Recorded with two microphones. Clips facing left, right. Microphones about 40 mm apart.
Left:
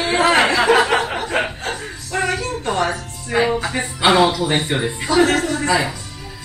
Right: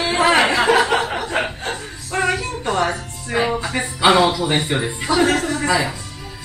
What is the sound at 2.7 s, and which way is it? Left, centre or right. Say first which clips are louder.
A woman's voice: right 1 dB; centre.